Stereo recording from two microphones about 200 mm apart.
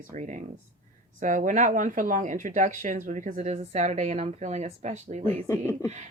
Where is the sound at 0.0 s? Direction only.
40° right (ahead or behind).